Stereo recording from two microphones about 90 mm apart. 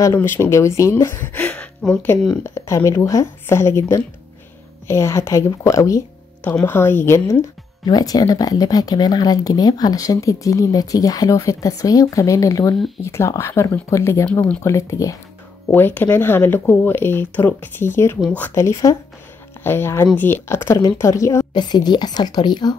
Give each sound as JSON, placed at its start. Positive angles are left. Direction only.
{"t": 0.0, "sound": "speech", "side_deg": 25}
{"t": 1.1, "sound": "a sound", "side_deg": 20}
{"t": 2.1, "sound": "speech", "side_deg": 30}
{"t": 6.6, "sound": "speech", "side_deg": 25}
{"t": 7.8, "sound": "speech", "side_deg": 45}
{"t": 15.7, "sound": "speech", "side_deg": 20}
{"t": 21.5, "sound": "speech", "side_deg": 50}